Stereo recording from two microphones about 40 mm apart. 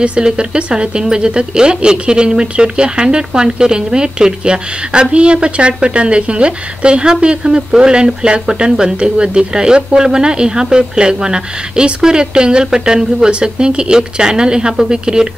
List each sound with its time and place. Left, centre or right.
0.0 s a woman's voice: right